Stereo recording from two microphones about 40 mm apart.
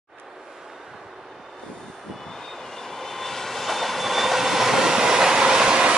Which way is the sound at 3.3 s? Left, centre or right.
Centre.